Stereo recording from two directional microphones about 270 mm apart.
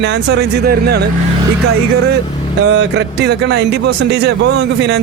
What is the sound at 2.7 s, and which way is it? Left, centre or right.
Speech, right.